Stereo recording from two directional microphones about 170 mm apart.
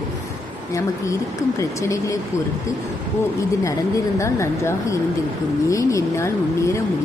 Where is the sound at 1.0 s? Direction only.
20° left (ahead or behind).